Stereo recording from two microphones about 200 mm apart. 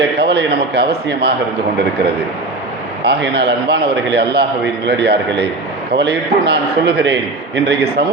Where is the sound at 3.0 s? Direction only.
60° right (ahead or behind).